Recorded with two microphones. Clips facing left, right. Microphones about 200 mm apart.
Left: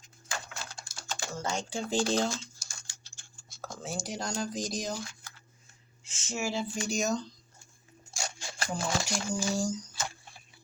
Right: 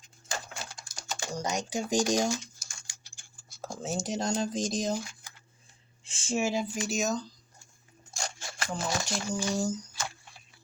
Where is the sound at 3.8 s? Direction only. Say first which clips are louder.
Right 5 dB; 20° right (ahead or behind).